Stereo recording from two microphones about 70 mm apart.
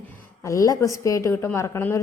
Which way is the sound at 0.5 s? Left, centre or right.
Left.